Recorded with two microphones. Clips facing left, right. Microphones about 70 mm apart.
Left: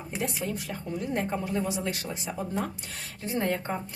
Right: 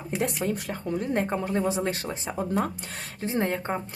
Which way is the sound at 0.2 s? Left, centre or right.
Right.